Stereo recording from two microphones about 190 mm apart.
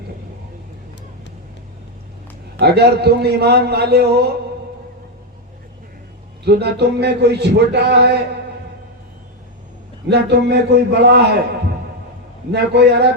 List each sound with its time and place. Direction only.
2.6 s a man's voice: 60° right (ahead or behind)
6.4 s a man's voice: 60° right (ahead or behind)
10.1 s a man's voice: 60° right (ahead or behind)
12.5 s a man's voice: 60° right (ahead or behind)